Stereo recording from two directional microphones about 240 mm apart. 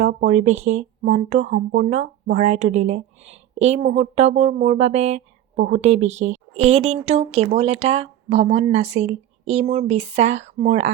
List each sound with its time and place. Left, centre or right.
0.0 s speech: right